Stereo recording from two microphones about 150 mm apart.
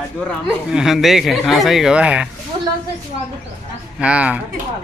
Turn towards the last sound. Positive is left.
turn(degrees=-10)  # may be behind; listen again after turning